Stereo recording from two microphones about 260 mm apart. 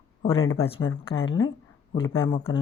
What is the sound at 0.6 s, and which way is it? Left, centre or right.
Speech, left.